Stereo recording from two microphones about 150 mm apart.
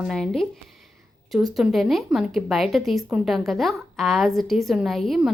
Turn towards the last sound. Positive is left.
turn(degrees=0)  # may be behind; listen again after turning